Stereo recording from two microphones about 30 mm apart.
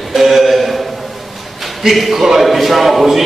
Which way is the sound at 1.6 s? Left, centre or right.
Centre.